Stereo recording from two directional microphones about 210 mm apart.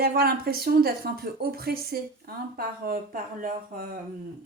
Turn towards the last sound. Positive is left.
turn(degrees=-45)  # may be behind; listen again after turning